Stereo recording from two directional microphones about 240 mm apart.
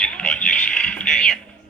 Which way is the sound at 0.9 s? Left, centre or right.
Centre.